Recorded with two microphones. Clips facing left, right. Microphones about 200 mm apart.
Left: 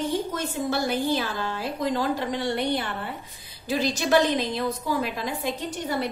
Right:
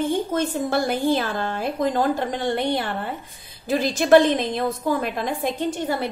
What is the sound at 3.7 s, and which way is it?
A woman's voice, 50° right (ahead or behind).